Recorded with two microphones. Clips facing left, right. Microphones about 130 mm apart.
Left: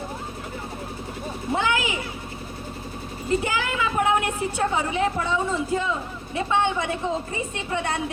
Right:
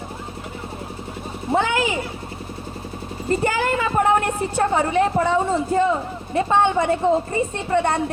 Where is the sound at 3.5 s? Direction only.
50° right (ahead or behind).